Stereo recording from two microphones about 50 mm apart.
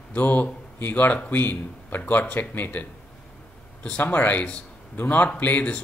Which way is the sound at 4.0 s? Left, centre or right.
Left.